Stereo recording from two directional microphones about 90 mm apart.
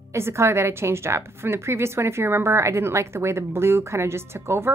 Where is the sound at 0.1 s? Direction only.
30° right (ahead or behind).